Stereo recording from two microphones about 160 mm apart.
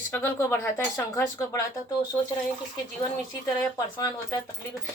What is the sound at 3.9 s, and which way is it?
Speech, 25° left (ahead or behind).